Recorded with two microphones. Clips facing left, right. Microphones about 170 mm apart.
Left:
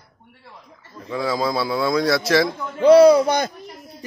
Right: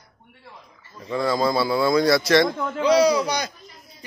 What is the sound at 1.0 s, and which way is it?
A man's voice, centre (ahead or behind).